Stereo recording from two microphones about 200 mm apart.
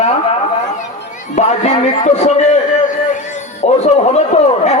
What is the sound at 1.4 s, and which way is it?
A man's voice, 35° left (ahead or behind).